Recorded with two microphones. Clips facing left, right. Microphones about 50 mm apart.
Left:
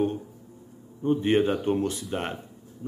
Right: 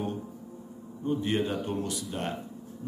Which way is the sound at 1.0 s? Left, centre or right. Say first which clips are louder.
Left 6 dB; left.